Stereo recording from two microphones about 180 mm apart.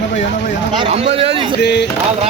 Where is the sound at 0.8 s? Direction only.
35° right (ahead or behind).